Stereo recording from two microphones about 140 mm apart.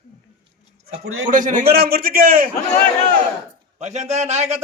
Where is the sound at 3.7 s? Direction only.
55° right (ahead or behind).